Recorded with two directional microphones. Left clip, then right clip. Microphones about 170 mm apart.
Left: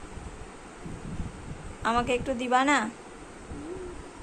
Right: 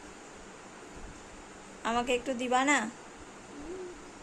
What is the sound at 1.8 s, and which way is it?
A woman's voice, 15° right (ahead or behind).